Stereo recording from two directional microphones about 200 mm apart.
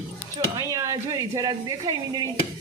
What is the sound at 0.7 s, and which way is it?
Speech, 15° right (ahead or behind).